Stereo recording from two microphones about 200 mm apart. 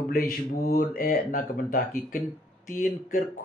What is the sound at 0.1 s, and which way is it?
Speech, 45° left (ahead or behind).